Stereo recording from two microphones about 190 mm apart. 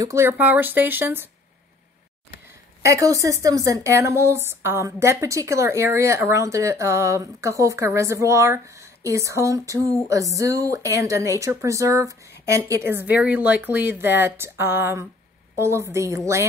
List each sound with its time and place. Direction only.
0.0 s speech: 15° right (ahead or behind)
2.8 s speech: 15° right (ahead or behind)